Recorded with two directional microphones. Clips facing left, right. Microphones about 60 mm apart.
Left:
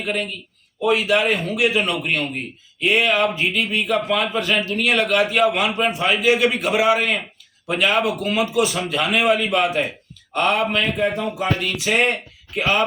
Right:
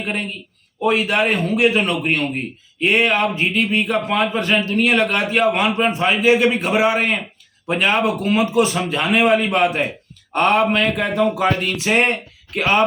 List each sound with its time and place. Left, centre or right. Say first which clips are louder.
0.0 s speech: even; right
0.8 s a man's voice: right 1 dB; right
10.8 s a man's voice: right 3 dB; right
11.6 s a man's voice: right 2 dB; right